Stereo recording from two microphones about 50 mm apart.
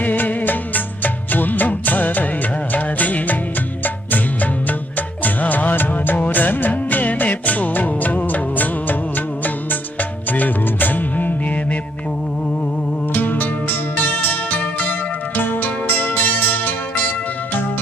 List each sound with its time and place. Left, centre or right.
0.0 s music of bollywood: left
2.7 s music: left
13.1 s music: left